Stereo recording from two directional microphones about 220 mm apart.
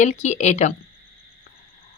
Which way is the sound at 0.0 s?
30° left (ahead or behind).